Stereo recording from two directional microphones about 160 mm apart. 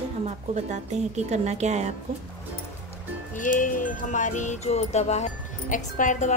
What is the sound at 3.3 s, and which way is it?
Music, 55° left (ahead or behind).